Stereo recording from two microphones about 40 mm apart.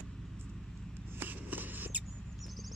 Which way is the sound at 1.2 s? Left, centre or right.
Right.